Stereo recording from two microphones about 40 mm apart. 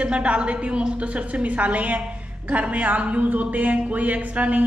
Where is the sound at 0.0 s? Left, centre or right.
Right.